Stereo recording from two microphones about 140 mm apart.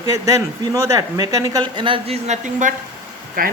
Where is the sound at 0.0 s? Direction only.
25° right (ahead or behind); by 2.7 s 60° right (ahead or behind).